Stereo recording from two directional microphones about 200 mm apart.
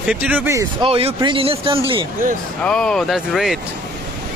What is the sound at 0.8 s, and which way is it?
Speech, 30° right (ahead or behind).